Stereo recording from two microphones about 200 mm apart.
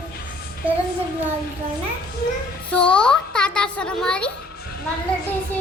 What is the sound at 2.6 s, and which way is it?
A child's voice, 5° left (ahead or behind).